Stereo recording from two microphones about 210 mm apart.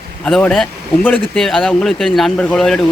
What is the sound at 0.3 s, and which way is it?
Speech, centre (ahead or behind).